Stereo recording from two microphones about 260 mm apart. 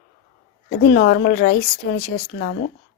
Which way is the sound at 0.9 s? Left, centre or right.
Left.